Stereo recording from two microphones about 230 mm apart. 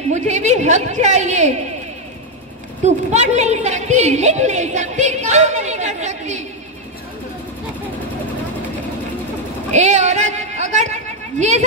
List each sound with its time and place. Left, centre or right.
0.1 s a woman's voice: right
2.8 s a woman's voice: right
9.7 s a sound: right